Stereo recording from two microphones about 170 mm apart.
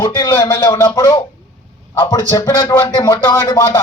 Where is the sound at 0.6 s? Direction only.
30° left (ahead or behind).